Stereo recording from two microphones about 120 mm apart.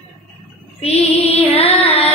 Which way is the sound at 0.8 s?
55° left (ahead or behind).